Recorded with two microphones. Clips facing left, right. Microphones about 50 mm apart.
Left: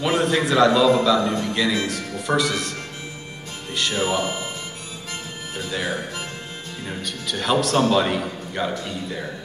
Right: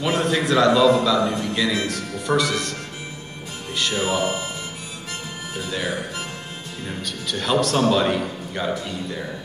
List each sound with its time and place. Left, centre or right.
0.0 s a man's voice: centre
3.7 s a man's voice: centre
5.6 s a man's voice: centre